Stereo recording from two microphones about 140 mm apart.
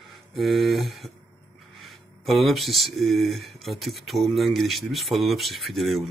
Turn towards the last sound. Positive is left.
turn(degrees=0)  # may be behind; listen again after turning